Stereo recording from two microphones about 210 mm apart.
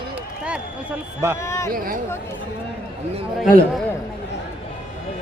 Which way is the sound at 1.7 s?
40° right (ahead or behind).